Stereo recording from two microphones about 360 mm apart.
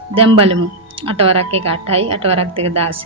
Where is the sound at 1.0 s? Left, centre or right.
Centre.